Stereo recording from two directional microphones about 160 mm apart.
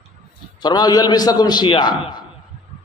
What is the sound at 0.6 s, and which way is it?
A man's voice, 25° left (ahead or behind).